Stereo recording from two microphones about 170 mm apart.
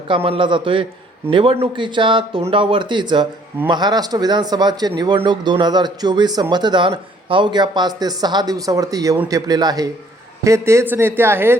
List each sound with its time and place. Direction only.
0.1 s a man's voice: 30° right (ahead or behind); by 11.5 s 15° right (ahead or behind)